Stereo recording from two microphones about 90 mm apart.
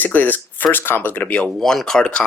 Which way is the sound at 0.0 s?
20° left (ahead or behind).